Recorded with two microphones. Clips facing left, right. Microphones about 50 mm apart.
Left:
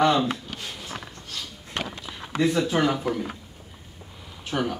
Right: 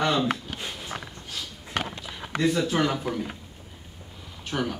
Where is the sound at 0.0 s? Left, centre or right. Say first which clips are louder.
Left 4 dB; centre.